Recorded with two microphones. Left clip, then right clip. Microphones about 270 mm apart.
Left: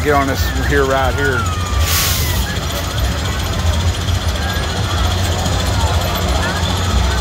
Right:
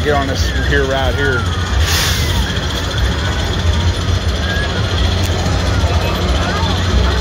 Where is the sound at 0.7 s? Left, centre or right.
Centre.